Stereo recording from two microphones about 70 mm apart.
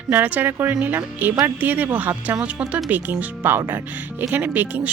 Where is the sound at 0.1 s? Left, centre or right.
Right.